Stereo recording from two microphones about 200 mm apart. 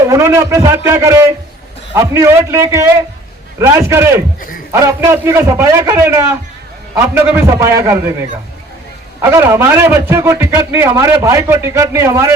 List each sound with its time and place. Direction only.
0.0 s a man's voice: 15° right (ahead or behind)
9.2 s a man's voice: 10° right (ahead or behind)